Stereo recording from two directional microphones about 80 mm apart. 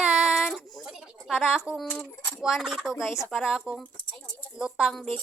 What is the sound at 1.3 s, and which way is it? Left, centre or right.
A woman's voice, centre.